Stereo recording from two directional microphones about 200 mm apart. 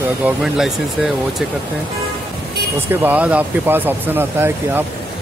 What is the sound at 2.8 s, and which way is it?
Speech, 10° right (ahead or behind).